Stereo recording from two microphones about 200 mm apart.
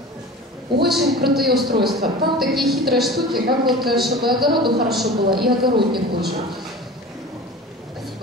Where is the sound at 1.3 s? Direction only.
Centre (ahead or behind).